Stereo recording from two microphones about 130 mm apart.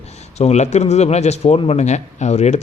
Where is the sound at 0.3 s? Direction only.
60° left (ahead or behind).